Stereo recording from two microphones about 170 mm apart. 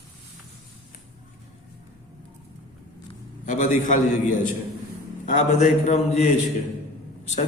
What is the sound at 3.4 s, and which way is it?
A man's voice, 50° left (ahead or behind).